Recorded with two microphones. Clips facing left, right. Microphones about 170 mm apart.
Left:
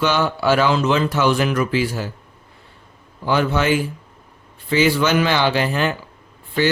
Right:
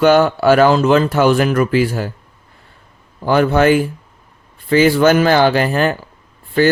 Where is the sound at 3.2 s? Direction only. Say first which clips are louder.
Right 6 dB; 55° right (ahead or behind).